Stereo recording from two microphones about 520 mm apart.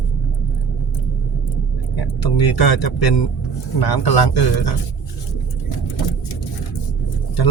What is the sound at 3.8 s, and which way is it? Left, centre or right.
Speech, left.